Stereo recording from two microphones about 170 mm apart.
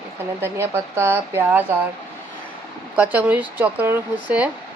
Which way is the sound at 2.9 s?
10° right (ahead or behind).